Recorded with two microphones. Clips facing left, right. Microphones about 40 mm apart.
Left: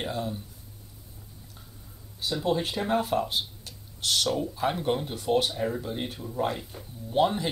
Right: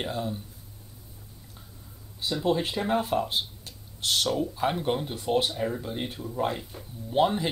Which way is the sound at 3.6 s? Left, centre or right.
Right.